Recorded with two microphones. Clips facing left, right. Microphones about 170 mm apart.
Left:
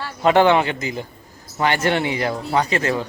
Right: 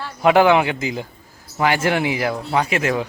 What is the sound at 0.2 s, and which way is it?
A man's voice, 10° right (ahead or behind).